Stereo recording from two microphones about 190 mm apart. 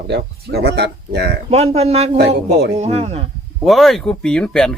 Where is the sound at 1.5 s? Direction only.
35° right (ahead or behind).